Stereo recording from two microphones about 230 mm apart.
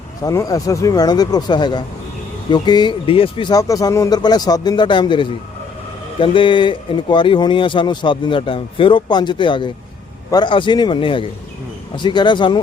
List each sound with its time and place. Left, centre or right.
0.3 s speech: centre